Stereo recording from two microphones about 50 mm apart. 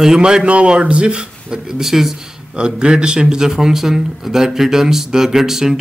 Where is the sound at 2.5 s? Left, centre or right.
Centre.